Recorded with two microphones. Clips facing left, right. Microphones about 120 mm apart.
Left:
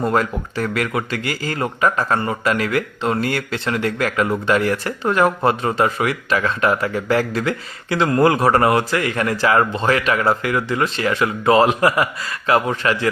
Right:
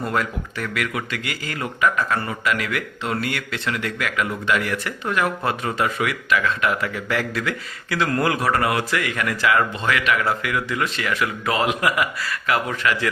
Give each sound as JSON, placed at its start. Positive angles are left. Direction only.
{"t": 0.0, "sound": "a man's voice", "side_deg": 35}